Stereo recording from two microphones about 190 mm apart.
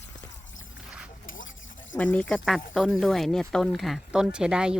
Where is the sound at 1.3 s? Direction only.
90° left.